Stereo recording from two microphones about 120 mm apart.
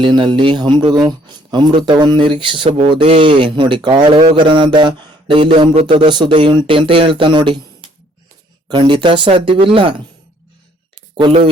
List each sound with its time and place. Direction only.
0.0 s speech: 40° right (ahead or behind)